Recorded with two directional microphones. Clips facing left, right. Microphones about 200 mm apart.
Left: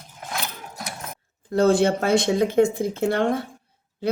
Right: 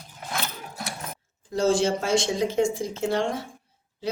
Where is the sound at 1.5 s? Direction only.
60° left (ahead or behind).